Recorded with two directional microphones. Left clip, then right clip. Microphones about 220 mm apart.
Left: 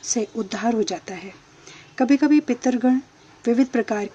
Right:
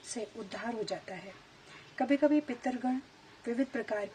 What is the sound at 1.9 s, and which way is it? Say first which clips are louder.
Speech: left 10 dB; 35° left (ahead or behind).